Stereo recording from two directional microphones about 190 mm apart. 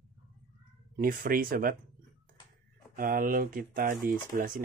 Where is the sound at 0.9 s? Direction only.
45° right (ahead or behind).